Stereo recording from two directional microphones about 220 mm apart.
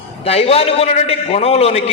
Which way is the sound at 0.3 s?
25° left (ahead or behind).